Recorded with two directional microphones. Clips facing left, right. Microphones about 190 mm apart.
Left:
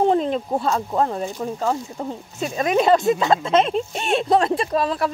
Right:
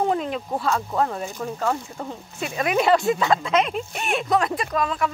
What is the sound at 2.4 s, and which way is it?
Speech, 25° left (ahead or behind).